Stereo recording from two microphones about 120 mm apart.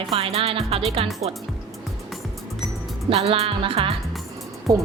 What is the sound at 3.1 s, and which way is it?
Speech, 55° right (ahead or behind).